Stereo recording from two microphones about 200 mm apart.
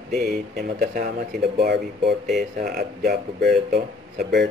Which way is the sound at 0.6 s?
50° right (ahead or behind).